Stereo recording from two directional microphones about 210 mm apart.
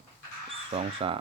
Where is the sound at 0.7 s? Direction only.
30° right (ahead or behind).